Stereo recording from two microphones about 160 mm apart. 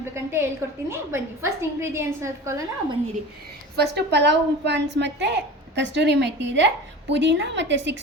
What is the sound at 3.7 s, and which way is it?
A woman's voice, 90° right.